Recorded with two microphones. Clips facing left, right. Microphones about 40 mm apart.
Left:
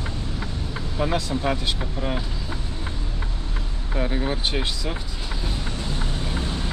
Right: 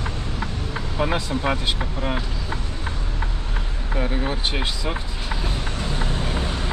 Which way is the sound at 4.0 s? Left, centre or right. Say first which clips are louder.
Even; centre.